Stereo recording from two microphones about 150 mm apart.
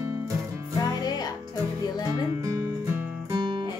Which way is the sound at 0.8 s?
25° left (ahead or behind).